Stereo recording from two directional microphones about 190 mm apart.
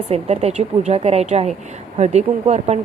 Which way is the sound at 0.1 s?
35° right (ahead or behind).